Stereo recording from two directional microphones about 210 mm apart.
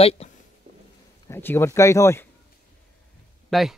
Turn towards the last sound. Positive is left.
turn(degrees=0)  # may be behind; listen again after turning